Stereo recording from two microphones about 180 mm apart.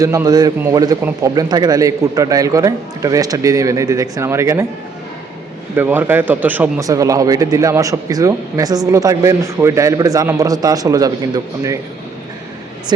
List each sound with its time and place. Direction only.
0.0 s speech: 15° right (ahead or behind)
5.7 s speech: 10° right (ahead or behind)